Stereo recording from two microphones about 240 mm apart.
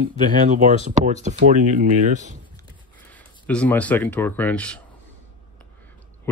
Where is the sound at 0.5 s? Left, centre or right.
Right.